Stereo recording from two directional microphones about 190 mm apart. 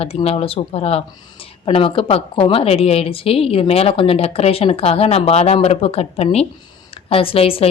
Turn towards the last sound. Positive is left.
turn(degrees=30)  # may be behind; listen again after turning